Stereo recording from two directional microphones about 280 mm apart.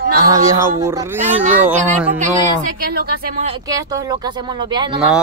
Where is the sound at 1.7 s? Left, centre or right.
Right.